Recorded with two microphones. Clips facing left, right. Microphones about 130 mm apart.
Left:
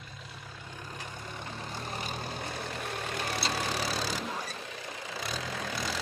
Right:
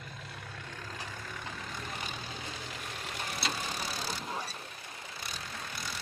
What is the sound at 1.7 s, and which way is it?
Vehicle, 35° left (ahead or behind).